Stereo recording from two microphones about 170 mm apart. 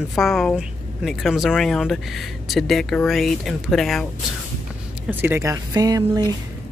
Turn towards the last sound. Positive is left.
turn(degrees=-20)  # may be behind; listen again after turning